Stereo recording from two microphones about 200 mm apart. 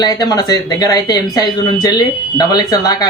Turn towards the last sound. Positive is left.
turn(degrees=20)  # may be behind; listen again after turning